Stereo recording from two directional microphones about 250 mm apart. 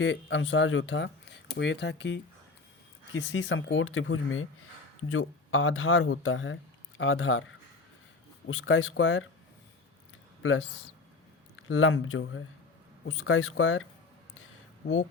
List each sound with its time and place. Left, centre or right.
0.0 s speech: left
11.5 s speech: left